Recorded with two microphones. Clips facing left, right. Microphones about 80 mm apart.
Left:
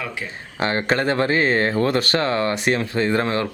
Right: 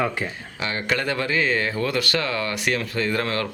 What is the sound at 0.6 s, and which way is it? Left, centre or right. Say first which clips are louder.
Speech: left 5 dB; left.